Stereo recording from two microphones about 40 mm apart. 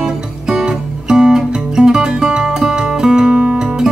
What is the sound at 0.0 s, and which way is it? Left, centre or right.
Guitar, centre.